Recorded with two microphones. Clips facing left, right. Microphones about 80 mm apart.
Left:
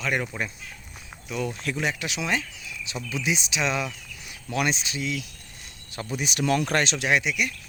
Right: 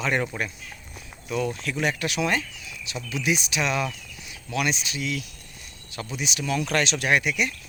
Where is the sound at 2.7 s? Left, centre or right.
Left.